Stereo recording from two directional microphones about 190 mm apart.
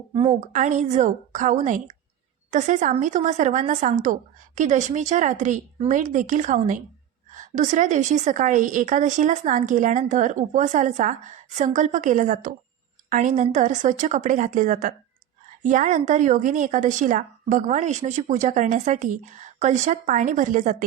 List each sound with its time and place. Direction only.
0.1 s a woman's voice: 25° right (ahead or behind)
0.3 s a woman's voice: 40° right (ahead or behind)